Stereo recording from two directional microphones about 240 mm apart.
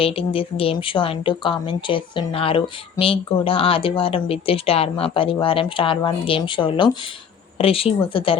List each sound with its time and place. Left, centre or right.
0.0 s speech: left